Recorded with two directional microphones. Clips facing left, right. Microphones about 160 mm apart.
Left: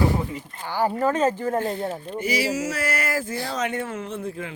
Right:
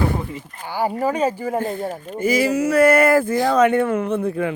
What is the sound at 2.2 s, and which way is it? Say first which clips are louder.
Speech: right 7 dB; 50° right (ahead or behind).